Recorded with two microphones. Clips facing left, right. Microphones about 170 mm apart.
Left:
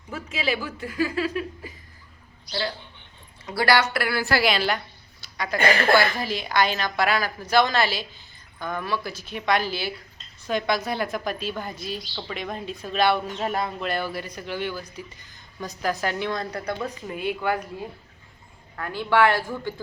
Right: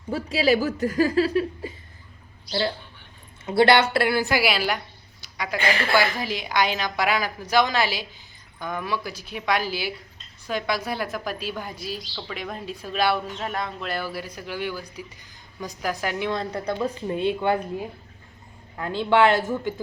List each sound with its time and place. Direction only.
0.1 s a woman's voice: 35° right (ahead or behind); by 4.8 s 5° right (ahead or behind)
5.2 s a sound: 10° right (ahead or behind)
6.0 s a woman's voice: 15° right (ahead or behind)